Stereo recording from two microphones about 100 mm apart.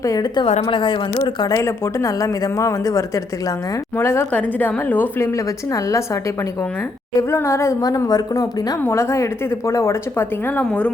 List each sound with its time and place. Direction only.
0.0 s speech: 40° left (ahead or behind)
0.7 s speech: 50° left (ahead or behind)
1.6 s a woman's voice: 30° left (ahead or behind)
4.3 s a woman's voice: 15° left (ahead or behind)
7.2 s a woman's voice: 30° left (ahead or behind)
7.8 s speech: 40° left (ahead or behind)
8.8 s a woman's voice: 25° left (ahead or behind)